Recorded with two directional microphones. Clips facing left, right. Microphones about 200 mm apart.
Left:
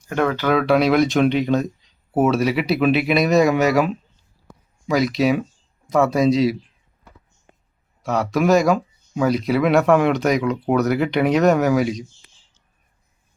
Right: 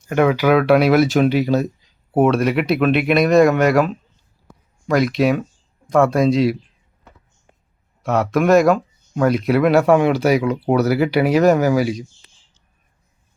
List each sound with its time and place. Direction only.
0.1 s speech: 10° right (ahead or behind)
8.0 s speech: centre (ahead or behind)